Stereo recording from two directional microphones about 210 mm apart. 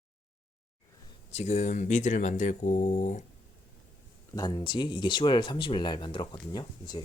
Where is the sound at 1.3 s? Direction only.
35° left (ahead or behind).